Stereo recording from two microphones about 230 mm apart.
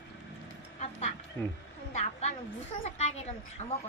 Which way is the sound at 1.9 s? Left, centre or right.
Left.